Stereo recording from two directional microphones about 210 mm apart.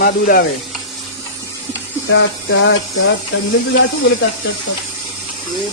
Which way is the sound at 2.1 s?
60° left (ahead or behind).